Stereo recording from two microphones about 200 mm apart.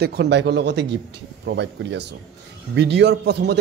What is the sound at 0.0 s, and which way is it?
Speech, 55° right (ahead or behind).